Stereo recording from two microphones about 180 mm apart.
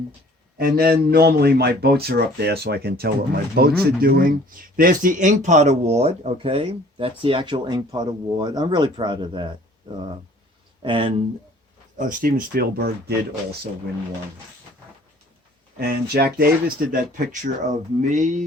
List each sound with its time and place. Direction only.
0.6 s a man's voice: 55° right (ahead or behind); by 9.5 s 25° right (ahead or behind)
10.8 s speech: 30° right (ahead or behind)
11.9 s a man's voice: 50° right (ahead or behind)
15.9 s speech: 60° right (ahead or behind); by 18.4 s 45° right (ahead or behind)